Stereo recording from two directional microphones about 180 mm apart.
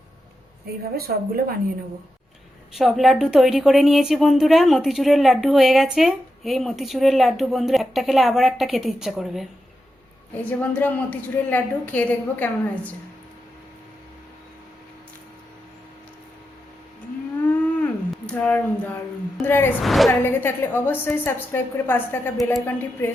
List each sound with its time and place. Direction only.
0.9 s a woman's voice: 55° right (ahead or behind)
2.7 s a woman's voice: centre (ahead or behind)
17.4 s a sound: 10° left (ahead or behind)
19.8 s a woman's voice: centre (ahead or behind)
20.2 s a woman's voice: 10° left (ahead or behind)